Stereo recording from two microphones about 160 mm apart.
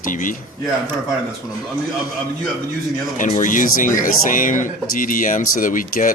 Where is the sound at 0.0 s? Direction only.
55° left (ahead or behind).